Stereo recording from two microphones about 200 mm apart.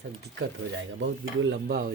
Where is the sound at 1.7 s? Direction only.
45° right (ahead or behind).